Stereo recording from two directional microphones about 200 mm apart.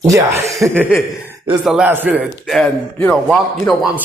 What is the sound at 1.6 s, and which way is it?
Speech, 5° right (ahead or behind).